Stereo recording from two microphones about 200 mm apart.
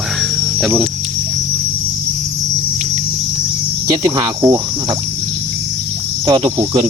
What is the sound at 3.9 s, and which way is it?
Speech, 20° right (ahead or behind).